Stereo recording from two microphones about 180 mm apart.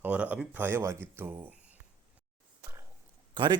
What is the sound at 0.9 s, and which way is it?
Speech, 5° left (ahead or behind).